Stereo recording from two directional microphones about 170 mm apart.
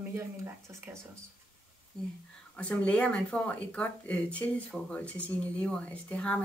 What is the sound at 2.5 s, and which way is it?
Speech, 5° left (ahead or behind).